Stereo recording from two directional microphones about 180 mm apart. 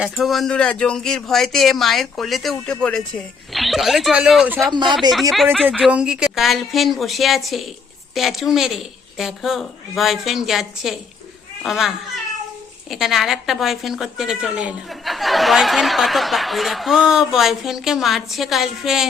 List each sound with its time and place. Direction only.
0.0 s speech: centre (ahead or behind)
4.7 s speech: 25° right (ahead or behind)
5.3 s speech: centre (ahead or behind)